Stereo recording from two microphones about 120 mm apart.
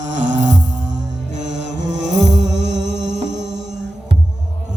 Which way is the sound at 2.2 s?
75° right (ahead or behind).